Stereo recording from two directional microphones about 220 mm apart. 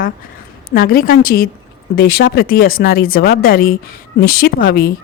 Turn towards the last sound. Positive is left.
turn(degrees=40)  # may be behind; listen again after turning